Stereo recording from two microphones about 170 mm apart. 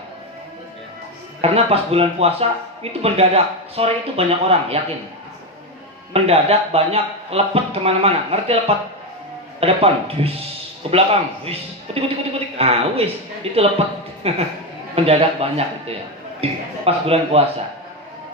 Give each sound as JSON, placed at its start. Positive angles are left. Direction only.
{"t": 1.4, "sound": "speech", "side_deg": -35}
{"t": 6.1, "sound": "speech", "side_deg": -35}